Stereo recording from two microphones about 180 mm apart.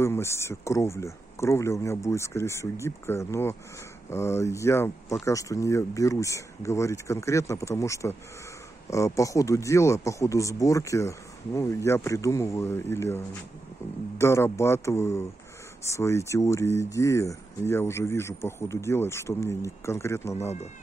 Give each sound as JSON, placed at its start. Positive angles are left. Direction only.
{"t": 0.0, "sound": "speech", "side_deg": 15}